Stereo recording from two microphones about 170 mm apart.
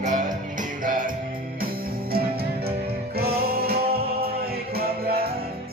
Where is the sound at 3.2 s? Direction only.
65° right (ahead or behind).